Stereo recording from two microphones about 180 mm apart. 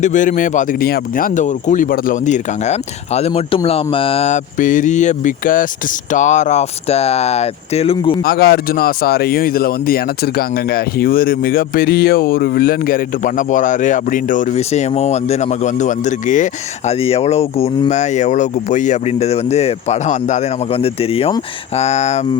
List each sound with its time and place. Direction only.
0.0 s speech: 45° left (ahead or behind)
8.2 s speech: 60° left (ahead or behind); by 22.2 s 40° left (ahead or behind)